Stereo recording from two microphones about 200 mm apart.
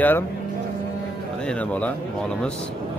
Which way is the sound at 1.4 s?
5° left (ahead or behind).